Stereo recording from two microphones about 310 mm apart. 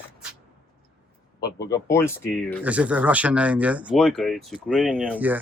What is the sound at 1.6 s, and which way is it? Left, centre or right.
Speech, centre.